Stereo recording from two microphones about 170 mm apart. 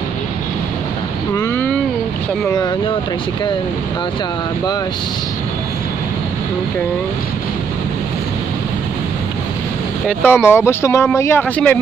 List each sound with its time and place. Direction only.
1.3 s vehicle: 15° left (ahead or behind)
2.5 s speech: 25° left (ahead or behind)
10.2 s speech: 15° left (ahead or behind)